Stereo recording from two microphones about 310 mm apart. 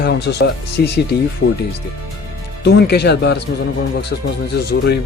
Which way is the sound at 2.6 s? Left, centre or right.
Left.